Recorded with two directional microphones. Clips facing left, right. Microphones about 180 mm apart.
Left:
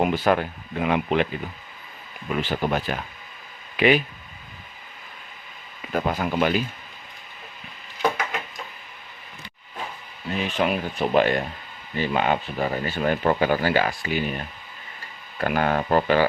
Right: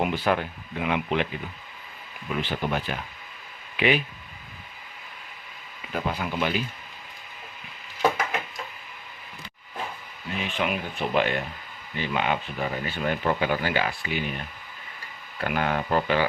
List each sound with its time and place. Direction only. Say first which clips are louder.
0.0 s speech: left 4 dB; 45° left (ahead or behind)
2.3 s speech: left 3 dB; 45° left (ahead or behind)
5.9 s speech: left 5 dB; 45° left (ahead or behind)
10.2 s speech: left 4 dB; 35° left (ahead or behind)